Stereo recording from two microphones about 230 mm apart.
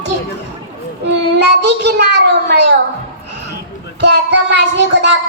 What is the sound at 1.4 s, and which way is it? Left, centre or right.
Child singing, right.